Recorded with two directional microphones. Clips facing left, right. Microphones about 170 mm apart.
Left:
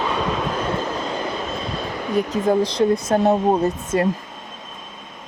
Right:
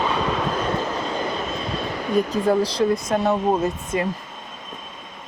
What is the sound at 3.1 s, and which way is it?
Speech, 45° left (ahead or behind).